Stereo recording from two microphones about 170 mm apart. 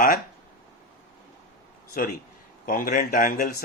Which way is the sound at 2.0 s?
60° left (ahead or behind).